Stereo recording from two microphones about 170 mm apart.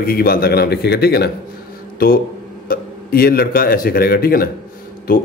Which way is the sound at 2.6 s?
60° left (ahead or behind).